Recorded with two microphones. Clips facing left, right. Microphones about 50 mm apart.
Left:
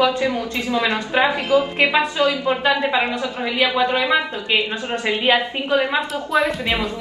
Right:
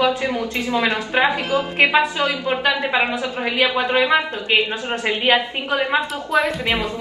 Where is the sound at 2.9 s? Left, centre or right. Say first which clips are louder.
Even; centre.